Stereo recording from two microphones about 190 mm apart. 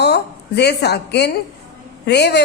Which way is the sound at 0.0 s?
60° left (ahead or behind).